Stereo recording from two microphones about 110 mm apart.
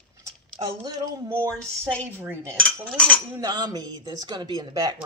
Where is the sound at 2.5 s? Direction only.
10° left (ahead or behind).